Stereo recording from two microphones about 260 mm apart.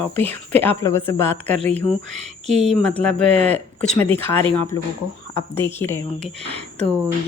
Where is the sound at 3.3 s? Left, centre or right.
Right.